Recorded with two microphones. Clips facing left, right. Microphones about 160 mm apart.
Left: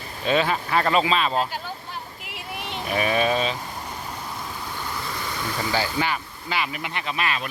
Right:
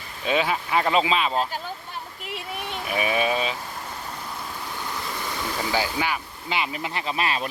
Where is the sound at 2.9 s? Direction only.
10° right (ahead or behind).